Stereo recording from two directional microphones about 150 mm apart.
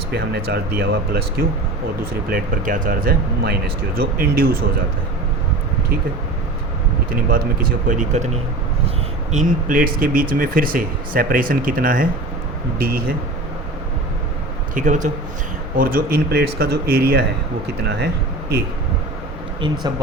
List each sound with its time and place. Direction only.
0.1 s speech: 90° right
2.3 s speech: 60° right (ahead or behind); by 4.5 s 85° right
7.3 s speech: 75° right (ahead or behind); by 8.3 s 55° right (ahead or behind)
9.3 s speech: 60° right (ahead or behind)
12.8 s speech: 90° right
14.8 s speech: 55° right (ahead or behind)
15.7 s speech: 70° right (ahead or behind); by 18.6 s 90° right
19.6 s speech: 30° right (ahead or behind)